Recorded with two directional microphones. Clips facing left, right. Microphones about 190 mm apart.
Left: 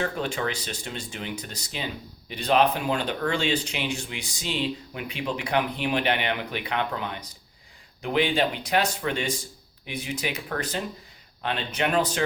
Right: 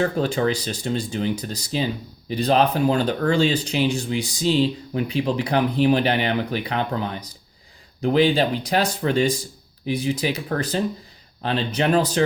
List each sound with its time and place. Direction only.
0.0 s speech: 35° right (ahead or behind)